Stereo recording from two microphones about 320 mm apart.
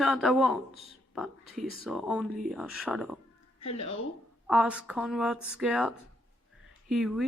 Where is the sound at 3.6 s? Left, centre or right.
Centre.